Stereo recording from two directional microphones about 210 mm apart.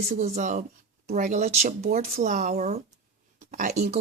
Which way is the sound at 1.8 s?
45° right (ahead or behind).